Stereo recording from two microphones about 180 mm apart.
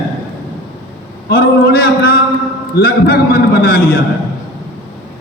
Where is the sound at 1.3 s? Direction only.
60° left (ahead or behind).